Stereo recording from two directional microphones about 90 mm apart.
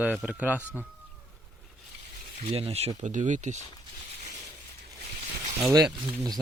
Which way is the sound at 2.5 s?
90° right.